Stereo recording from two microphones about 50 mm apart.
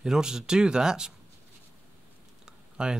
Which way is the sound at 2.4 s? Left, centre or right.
Centre.